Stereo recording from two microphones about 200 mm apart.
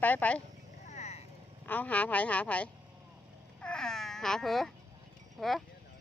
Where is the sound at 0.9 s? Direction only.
35° left (ahead or behind).